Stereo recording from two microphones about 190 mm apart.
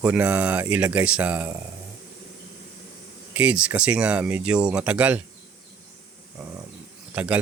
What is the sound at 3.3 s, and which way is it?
Speech, 5° right (ahead or behind).